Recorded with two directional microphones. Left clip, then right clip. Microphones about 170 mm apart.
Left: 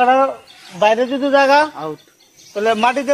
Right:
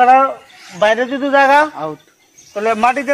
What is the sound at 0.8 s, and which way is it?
A man's voice, 25° left (ahead or behind).